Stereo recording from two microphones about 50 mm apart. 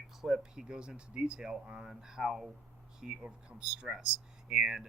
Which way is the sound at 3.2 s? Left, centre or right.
Right.